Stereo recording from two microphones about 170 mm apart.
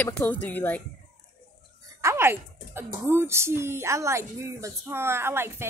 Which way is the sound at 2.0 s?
15° right (ahead or behind).